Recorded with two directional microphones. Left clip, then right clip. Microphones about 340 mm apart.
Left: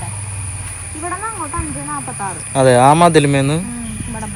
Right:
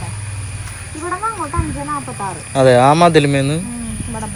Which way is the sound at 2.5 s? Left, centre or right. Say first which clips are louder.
Even; centre.